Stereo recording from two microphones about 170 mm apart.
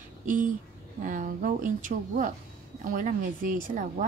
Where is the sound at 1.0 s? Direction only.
50° right (ahead or behind).